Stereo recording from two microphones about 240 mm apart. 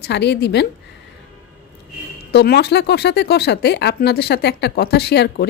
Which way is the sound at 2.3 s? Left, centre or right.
Left.